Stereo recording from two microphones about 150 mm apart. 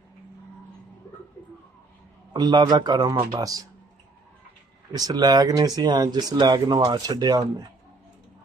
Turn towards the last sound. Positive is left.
turn(degrees=-25)  # may be behind; listen again after turning